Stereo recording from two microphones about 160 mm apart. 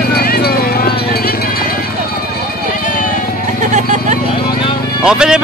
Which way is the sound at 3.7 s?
45° right (ahead or behind).